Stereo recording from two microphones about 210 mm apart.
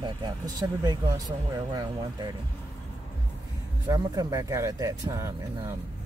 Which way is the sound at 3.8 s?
15° right (ahead or behind).